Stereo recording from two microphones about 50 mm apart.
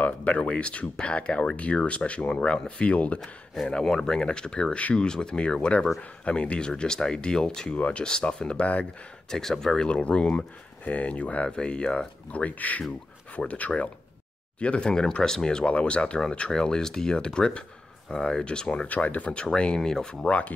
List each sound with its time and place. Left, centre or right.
0.0 s speech: left
3.8 s speech: centre
9.3 s speech: centre
9.8 s speech: left
18.9 s speech: left